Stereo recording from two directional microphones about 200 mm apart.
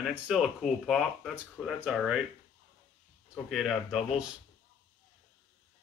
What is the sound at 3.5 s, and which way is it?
Speech, centre (ahead or behind).